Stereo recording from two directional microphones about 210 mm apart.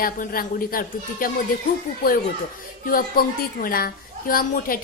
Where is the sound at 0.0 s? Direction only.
45° left (ahead or behind).